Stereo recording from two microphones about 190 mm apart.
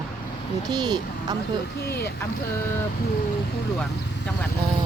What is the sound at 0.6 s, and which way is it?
Speech, 20° right (ahead or behind).